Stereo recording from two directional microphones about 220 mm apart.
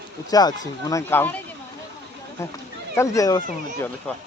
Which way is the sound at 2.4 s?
15° left (ahead or behind).